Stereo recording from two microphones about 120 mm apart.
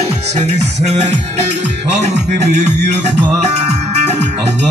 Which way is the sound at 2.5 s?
75° right (ahead or behind).